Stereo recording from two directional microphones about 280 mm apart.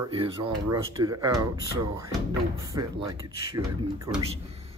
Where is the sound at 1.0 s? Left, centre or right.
Centre.